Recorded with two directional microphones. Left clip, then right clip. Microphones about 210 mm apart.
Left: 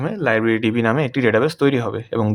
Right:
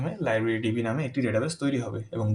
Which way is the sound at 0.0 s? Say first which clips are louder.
Left 8 dB; 40° left (ahead or behind).